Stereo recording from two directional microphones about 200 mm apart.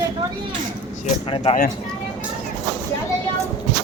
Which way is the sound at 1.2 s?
25° left (ahead or behind).